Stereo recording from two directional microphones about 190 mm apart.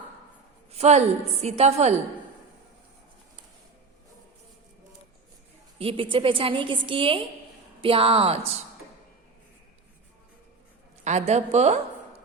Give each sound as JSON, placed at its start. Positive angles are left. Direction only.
{"t": 0.7, "sound": "a woman's voice", "side_deg": -35}
{"t": 5.8, "sound": "a woman's voice", "side_deg": -25}
{"t": 11.0, "sound": "a woman's voice", "side_deg": -35}